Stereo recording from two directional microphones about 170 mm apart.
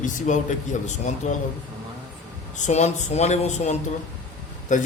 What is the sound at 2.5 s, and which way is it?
A man's voice, 45° left (ahead or behind).